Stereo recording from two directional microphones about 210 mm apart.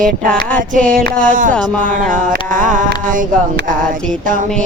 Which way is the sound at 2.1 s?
40° right (ahead or behind).